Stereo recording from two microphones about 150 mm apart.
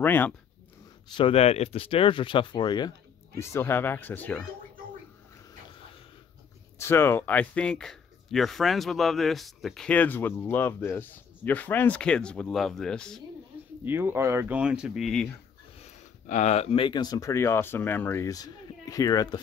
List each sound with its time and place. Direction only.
0.0 s speech: 10° left (ahead or behind)
1.1 s speech: 40° left (ahead or behind)
3.3 s speech: 20° left (ahead or behind)
6.8 s speech: 15° left (ahead or behind)
13.8 s speech: 15° right (ahead or behind)
15.8 s speech: 50° left (ahead or behind); by 19.4 s 25° left (ahead or behind)